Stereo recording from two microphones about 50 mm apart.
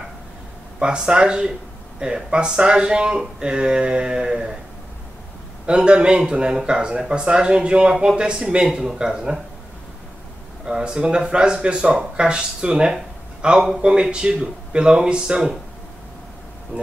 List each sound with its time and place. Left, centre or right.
0.7 s speech: centre
5.7 s speech: right
10.6 s a man's voice: centre
16.7 s speech: centre